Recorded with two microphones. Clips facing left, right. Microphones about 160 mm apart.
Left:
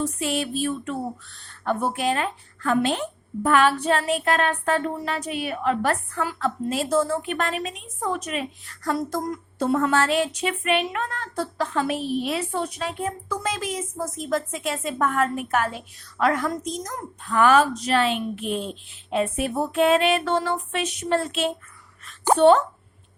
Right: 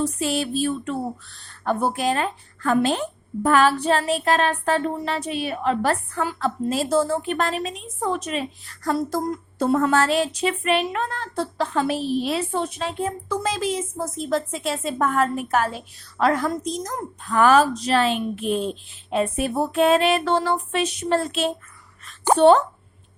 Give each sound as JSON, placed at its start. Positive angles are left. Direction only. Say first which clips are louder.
{"t": 0.0, "sound": "speech", "louder": "right 2 dB", "side_deg": -35}